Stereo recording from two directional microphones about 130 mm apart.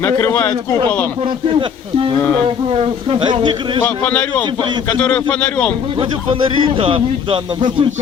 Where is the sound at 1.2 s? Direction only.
40° right (ahead or behind).